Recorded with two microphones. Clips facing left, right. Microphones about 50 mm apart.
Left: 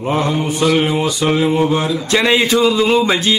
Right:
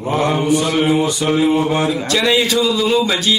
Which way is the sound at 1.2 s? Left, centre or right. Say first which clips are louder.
Even; left.